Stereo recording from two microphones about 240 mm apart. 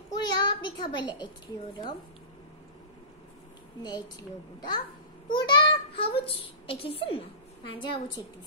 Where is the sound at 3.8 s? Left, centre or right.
Centre.